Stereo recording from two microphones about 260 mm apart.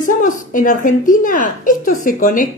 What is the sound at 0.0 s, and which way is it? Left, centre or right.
A woman's voice, left.